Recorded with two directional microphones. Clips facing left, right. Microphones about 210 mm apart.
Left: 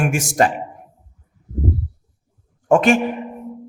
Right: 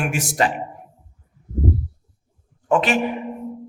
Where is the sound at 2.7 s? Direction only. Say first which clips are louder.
Left 5 dB; 45° left (ahead or behind).